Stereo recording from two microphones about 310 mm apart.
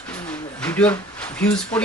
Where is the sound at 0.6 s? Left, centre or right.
Centre.